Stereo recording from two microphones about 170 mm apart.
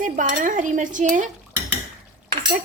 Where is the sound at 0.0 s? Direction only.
50° right (ahead or behind).